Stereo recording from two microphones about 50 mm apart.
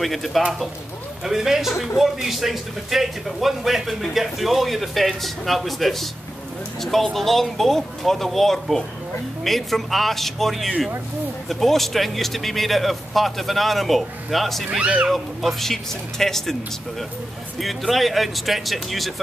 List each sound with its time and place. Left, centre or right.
0.0 s a man's voice: centre
14.8 s speech: right
15.0 s a man's voice: centre
17.6 s a man's voice: centre